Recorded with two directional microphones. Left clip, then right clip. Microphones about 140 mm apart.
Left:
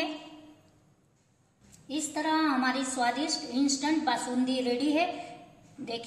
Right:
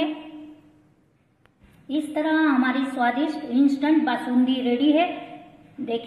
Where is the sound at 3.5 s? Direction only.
25° right (ahead or behind).